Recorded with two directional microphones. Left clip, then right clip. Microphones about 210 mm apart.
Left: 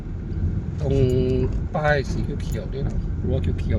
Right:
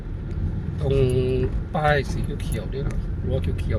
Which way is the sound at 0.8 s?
Centre (ahead or behind).